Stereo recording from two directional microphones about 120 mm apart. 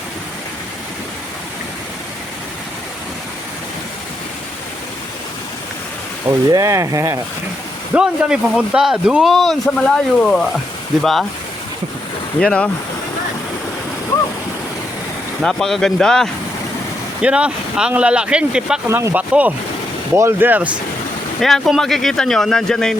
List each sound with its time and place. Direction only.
6.5 s speech: 30° right (ahead or behind)
7.9 s speech: 10° right (ahead or behind)
12.4 s speech: 10° left (ahead or behind)
15.4 s speech: 5° left (ahead or behind)
17.2 s speech: 10° right (ahead or behind)
18.9 s speech: 25° right (ahead or behind)
19.1 s speech: 10° right (ahead or behind)
21.4 s speech: centre (ahead or behind)